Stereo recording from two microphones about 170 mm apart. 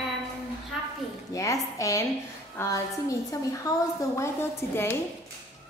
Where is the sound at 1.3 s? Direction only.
20° left (ahead or behind).